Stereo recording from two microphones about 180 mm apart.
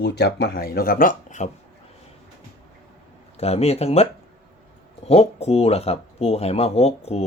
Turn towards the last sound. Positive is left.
turn(degrees=35)  # may be behind; listen again after turning